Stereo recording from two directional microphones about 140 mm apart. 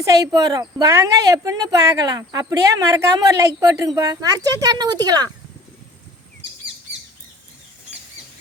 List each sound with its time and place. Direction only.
0.0 s a woman's voice: 25° right (ahead or behind)